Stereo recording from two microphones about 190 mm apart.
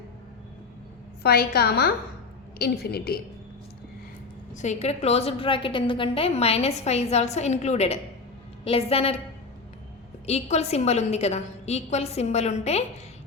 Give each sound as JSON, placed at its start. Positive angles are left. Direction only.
{"t": 1.2, "sound": "a woman's voice", "side_deg": 55}
{"t": 4.5, "sound": "a woman's voice", "side_deg": 40}
{"t": 10.2, "sound": "a woman's voice", "side_deg": 35}